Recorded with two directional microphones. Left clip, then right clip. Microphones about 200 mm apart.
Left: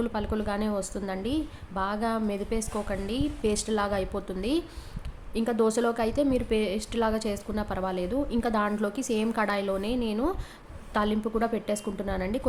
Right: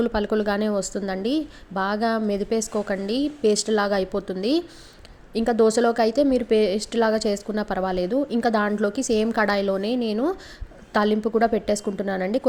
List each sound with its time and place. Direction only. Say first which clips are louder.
0.0 s speech: right 8 dB; 25° right (ahead or behind)